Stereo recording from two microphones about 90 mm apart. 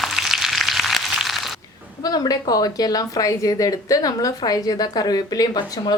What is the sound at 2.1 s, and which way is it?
Speech, 45° left (ahead or behind).